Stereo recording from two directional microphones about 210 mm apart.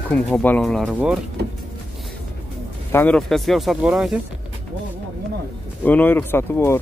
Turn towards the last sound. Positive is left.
turn(degrees=10)  # may be behind; listen again after turning